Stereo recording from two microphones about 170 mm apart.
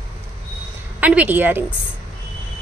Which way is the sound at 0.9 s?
10° right (ahead or behind).